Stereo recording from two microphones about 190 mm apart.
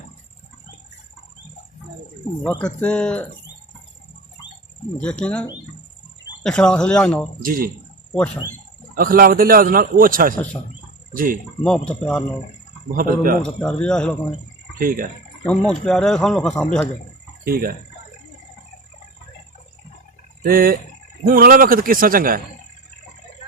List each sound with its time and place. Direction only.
2.4 s speech: 10° left (ahead or behind)
4.9 s speech: 5° left (ahead or behind)
7.4 s a man's voice: 45° right (ahead or behind)
9.0 s a man's voice: 50° right (ahead or behind)
11.6 s speech: 5° left (ahead or behind)
13.0 s a man's voice: 50° right (ahead or behind)
13.4 s speech: 5° left (ahead or behind)
14.8 s a man's voice: 50° right (ahead or behind)
15.4 s speech: 5° left (ahead or behind)
17.4 s speech: 50° right (ahead or behind)
20.4 s a man's voice: 50° right (ahead or behind)